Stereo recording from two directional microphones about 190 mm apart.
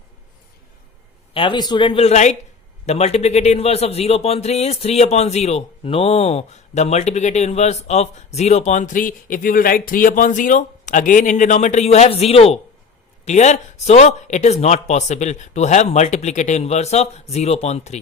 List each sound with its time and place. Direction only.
1.3 s speech: 25° left (ahead or behind)